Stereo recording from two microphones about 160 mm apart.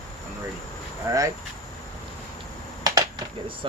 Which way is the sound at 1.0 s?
15° right (ahead or behind).